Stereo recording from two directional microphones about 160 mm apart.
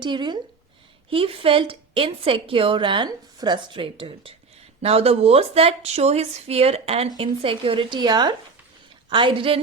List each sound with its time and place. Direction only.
0.0 s a woman's voice: 30° right (ahead or behind)